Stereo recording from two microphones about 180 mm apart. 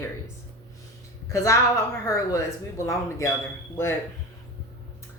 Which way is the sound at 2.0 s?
15° left (ahead or behind).